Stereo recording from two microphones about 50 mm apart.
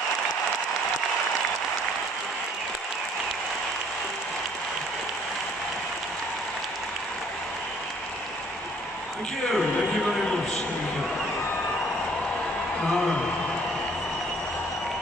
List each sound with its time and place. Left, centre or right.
12.8 s a man's voice: centre